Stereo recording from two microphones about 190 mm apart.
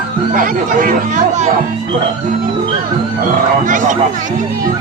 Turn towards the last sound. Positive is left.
turn(degrees=-40)  # may be behind; listen again after turning